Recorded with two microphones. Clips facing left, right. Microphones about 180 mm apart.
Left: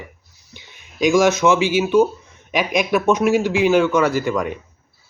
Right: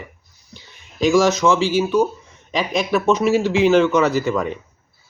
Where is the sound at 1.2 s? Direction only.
20° left (ahead or behind).